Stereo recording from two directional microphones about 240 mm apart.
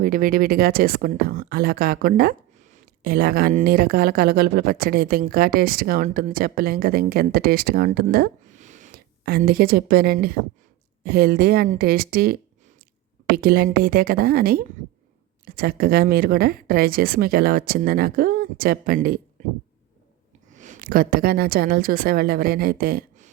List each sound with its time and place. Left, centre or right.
0.0 s a woman's voice: right
20.5 s a woman's voice: right